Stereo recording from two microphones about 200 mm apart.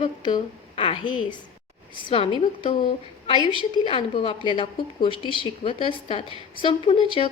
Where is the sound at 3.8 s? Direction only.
25° left (ahead or behind).